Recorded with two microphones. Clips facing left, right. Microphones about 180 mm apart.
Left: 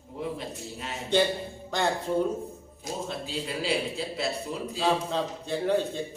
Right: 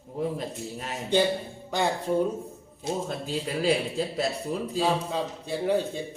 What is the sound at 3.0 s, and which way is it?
Speech, 45° right (ahead or behind).